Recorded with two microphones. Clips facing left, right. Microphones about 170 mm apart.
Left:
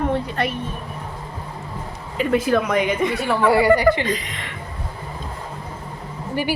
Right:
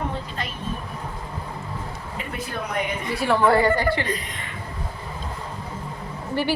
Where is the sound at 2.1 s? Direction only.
90° left.